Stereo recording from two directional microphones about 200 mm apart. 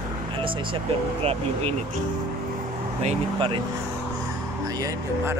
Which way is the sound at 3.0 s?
35° right (ahead or behind).